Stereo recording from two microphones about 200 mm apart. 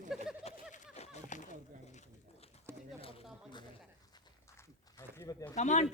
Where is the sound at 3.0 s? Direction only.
30° left (ahead or behind).